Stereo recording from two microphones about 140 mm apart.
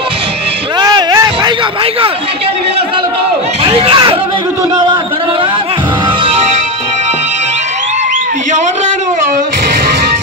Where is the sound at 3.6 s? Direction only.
40° right (ahead or behind).